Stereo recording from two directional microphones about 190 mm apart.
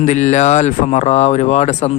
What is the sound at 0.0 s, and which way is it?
Speech, 40° left (ahead or behind).